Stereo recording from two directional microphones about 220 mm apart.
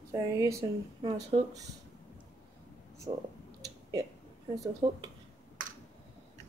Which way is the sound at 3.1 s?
20° right (ahead or behind).